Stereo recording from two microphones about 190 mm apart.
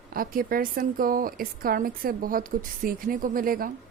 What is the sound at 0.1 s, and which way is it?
Speech, 50° right (ahead or behind).